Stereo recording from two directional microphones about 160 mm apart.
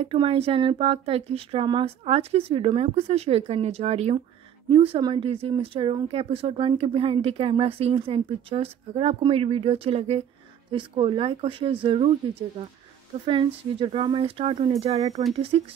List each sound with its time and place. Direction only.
0.0 s speech: 35° right (ahead or behind)
13.2 s speech: 30° right (ahead or behind)